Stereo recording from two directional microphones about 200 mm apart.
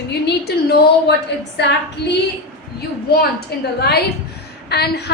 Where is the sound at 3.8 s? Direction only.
55° left (ahead or behind).